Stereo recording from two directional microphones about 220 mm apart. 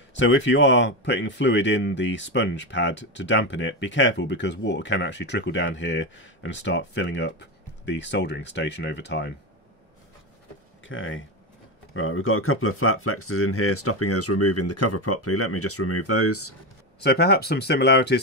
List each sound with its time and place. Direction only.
0.1 s speech: 55° left (ahead or behind)
10.9 s speech: 60° left (ahead or behind); by 16.5 s 90° left
17.0 s speech: 45° left (ahead or behind)